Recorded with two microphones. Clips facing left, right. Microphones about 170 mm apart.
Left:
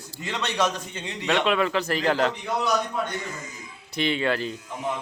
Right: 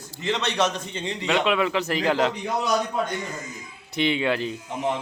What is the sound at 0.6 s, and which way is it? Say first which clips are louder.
A man's voice: right 1 dB; centre (ahead or behind).